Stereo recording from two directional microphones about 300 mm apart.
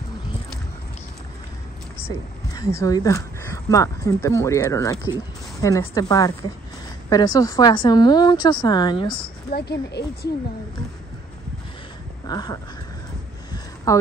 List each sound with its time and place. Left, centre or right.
2.5 s speech: centre
9.5 s speech: left
12.3 s speech: centre
13.9 s a woman's voice: centre